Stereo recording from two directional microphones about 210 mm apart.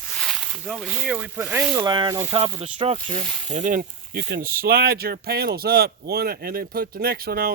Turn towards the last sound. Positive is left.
turn(degrees=-45)  # may be behind; listen again after turning